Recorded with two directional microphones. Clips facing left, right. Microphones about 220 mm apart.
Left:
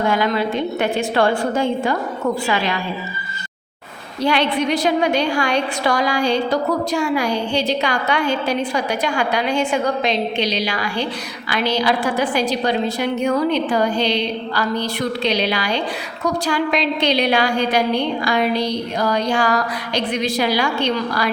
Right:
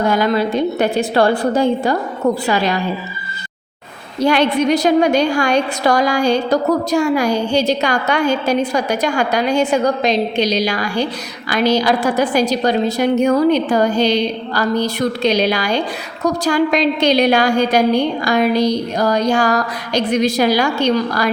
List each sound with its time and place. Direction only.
0.1 s a woman's voice: 40° right (ahead or behind)
4.2 s a woman's voice: 45° right (ahead or behind)